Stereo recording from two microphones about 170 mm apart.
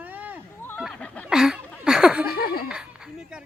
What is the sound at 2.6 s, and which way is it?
Speech, 5° right (ahead or behind).